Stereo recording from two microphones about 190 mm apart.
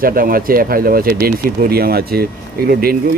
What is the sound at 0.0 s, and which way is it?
Speech, 50° right (ahead or behind).